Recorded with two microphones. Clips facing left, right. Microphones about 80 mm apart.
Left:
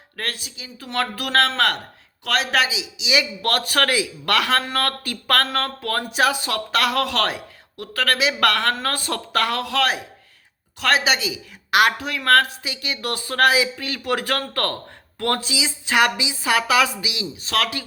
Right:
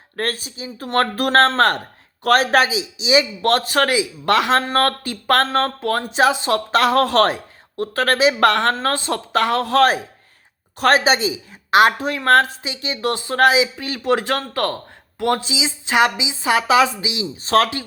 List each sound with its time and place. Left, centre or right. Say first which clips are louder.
0.2 s a man's voice: right 6 dB; right